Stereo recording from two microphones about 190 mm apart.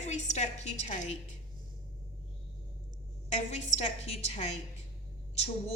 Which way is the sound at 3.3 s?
35° left (ahead or behind).